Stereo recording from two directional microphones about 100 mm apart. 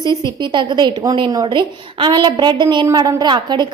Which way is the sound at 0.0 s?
45° right (ahead or behind).